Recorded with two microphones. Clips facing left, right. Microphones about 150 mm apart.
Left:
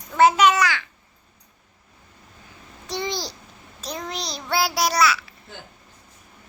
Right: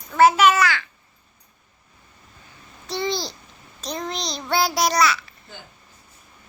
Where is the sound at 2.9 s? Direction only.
15° left (ahead or behind).